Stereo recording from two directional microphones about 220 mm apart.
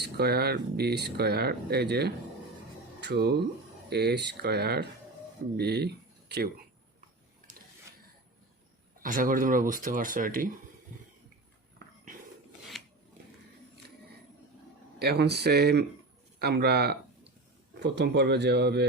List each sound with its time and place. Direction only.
0.0 s speech: 45° right (ahead or behind)
9.0 s speech: 40° right (ahead or behind)
12.7 s a sound: centre (ahead or behind)
14.9 s speech: 45° right (ahead or behind)